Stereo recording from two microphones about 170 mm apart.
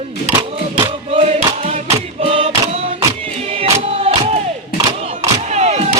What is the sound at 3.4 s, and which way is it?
Crowd, 35° right (ahead or behind).